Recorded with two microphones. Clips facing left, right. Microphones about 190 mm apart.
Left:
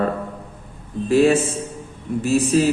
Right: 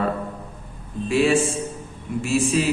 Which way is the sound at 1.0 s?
40° left (ahead or behind).